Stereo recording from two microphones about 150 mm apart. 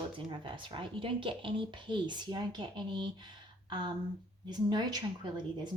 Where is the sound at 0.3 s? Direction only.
30° right (ahead or behind).